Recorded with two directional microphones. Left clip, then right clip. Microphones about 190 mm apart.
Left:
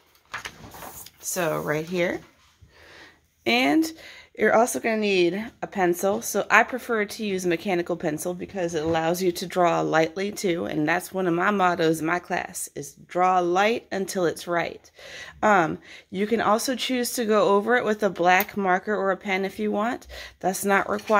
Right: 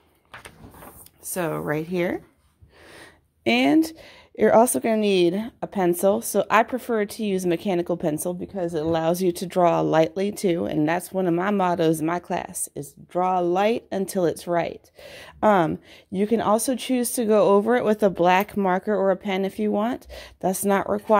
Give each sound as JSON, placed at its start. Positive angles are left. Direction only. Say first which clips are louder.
{"t": 1.3, "sound": "speech", "louder": "left 1 dB", "side_deg": -40}
{"t": 3.4, "sound": "speech", "louder": "right 2 dB", "side_deg": -35}